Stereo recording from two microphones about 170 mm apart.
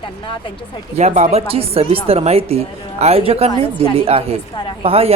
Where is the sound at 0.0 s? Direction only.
30° left (ahead or behind).